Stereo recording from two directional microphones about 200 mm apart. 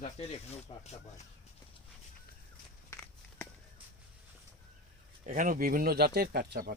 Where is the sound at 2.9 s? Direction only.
10° left (ahead or behind).